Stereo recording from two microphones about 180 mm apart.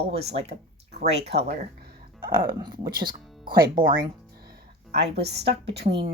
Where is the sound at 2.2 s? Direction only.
55° right (ahead or behind).